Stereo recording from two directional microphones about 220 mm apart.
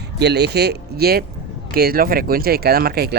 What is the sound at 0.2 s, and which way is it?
Speech, 50° right (ahead or behind).